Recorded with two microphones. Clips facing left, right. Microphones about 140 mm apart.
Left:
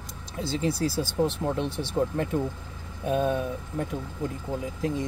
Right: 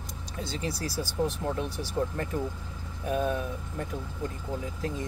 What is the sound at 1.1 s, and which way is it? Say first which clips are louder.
Speech: left 3 dB; 25° left (ahead or behind).